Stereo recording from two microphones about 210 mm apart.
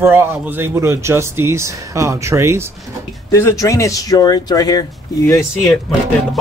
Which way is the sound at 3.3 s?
15° left (ahead or behind).